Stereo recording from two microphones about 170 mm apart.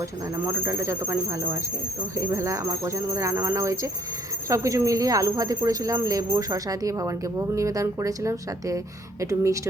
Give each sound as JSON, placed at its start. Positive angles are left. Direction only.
{"t": 0.0, "sound": "speech", "side_deg": -15}